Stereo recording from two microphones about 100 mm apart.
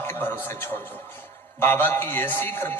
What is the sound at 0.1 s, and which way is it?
Music, 20° left (ahead or behind).